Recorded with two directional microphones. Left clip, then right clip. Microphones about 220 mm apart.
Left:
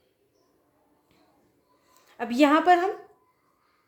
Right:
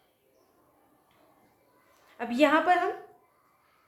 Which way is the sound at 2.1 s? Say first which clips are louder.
Left 2 dB; 40° left (ahead or behind).